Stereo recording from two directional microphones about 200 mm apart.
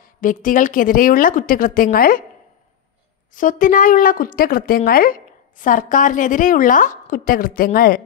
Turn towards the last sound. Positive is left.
turn(degrees=45)  # may be behind; listen again after turning